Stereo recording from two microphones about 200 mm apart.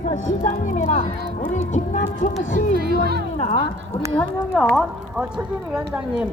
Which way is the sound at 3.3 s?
35° left (ahead or behind).